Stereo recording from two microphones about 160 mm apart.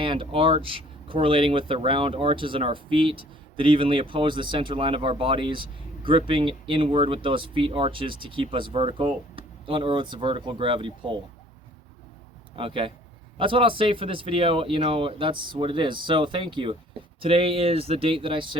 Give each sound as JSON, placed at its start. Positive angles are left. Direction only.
{"t": 0.0, "sound": "speech", "side_deg": -35}
{"t": 12.5, "sound": "speech", "side_deg": -35}